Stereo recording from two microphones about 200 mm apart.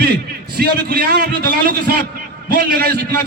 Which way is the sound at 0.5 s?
50° right (ahead or behind).